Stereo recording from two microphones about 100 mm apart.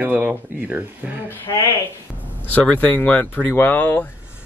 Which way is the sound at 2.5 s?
15° left (ahead or behind).